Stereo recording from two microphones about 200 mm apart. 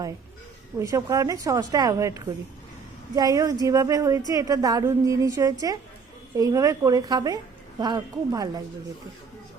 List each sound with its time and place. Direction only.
0.8 s a woman's voice: 15° right (ahead or behind)